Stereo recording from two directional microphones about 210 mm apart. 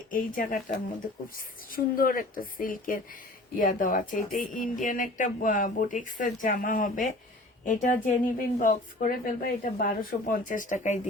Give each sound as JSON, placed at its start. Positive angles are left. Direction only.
{"t": 0.1, "sound": "a woman's voice", "side_deg": 40}